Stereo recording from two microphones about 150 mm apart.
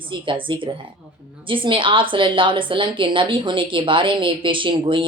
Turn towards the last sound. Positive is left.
turn(degrees=-35)  # may be behind; listen again after turning